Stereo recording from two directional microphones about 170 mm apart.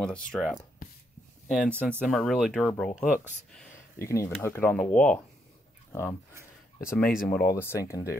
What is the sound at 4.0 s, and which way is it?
Speech, 15° left (ahead or behind).